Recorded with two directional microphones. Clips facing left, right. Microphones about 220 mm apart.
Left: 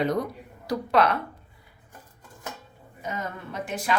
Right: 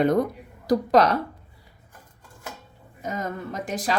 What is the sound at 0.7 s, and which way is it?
Speech, 40° right (ahead or behind).